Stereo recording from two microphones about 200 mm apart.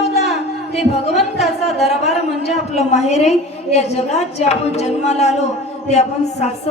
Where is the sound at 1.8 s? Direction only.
35° left (ahead or behind).